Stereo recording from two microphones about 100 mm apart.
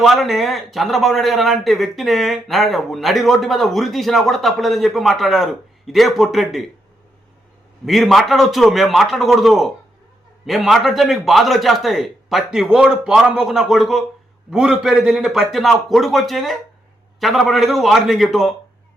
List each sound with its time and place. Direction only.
0.0 s a man's voice: centre (ahead or behind)
7.9 s a man's voice: centre (ahead or behind)